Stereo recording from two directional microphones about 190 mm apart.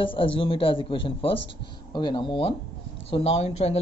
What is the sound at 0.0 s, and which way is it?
Speech, 25° left (ahead or behind).